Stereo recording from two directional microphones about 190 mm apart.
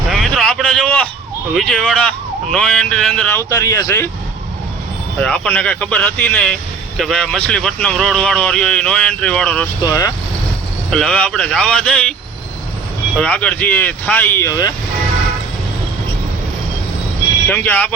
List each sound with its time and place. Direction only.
0.1 s a sound: centre (ahead or behind)
1.5 s speech: 5° left (ahead or behind)
3.5 s speech: 15° left (ahead or behind)
5.2 s speech: 5° left (ahead or behind)
9.8 s speech: 20° left (ahead or behind)
10.9 s speech: 5° left (ahead or behind)
13.1 s speech: 5° left (ahead or behind)
17.5 s speech: 10° left (ahead or behind)